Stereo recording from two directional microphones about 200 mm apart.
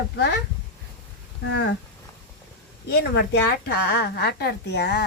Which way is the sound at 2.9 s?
55° left (ahead or behind).